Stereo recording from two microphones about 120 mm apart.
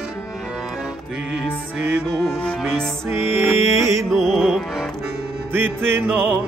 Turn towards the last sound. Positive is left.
turn(degrees=-15)  # may be behind; listen again after turning